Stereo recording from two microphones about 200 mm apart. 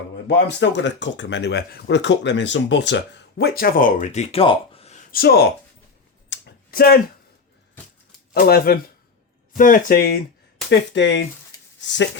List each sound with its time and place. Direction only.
0.3 s speech: 60° left (ahead or behind); by 4.9 s 30° left (ahead or behind)
5.1 s speech: 50° left (ahead or behind)
6.3 s clicking: 55° left (ahead or behind)
8.3 s speech: 50° left (ahead or behind)
10.7 s speech: 60° left (ahead or behind)